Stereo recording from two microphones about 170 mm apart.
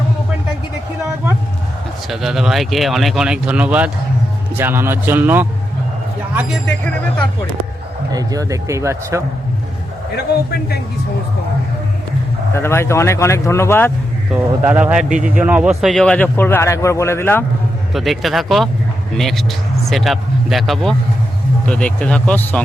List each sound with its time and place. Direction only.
2.0 s speech: centre (ahead or behind)
6.7 s speech: 5° left (ahead or behind)
8.1 s speech: 20° right (ahead or behind)
12.5 s speech: 15° left (ahead or behind)
14.3 s speech: 10° right (ahead or behind); by 17.4 s 15° left (ahead or behind)
17.9 s speech: centre (ahead or behind)